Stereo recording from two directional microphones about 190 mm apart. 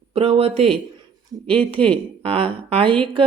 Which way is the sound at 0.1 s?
30° right (ahead or behind).